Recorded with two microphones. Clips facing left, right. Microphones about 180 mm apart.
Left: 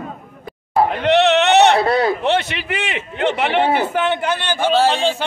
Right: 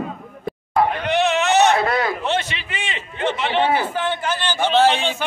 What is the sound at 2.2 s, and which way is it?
A man's voice, 65° left (ahead or behind).